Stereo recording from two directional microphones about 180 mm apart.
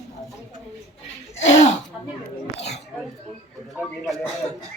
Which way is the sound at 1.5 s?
40° left (ahead or behind).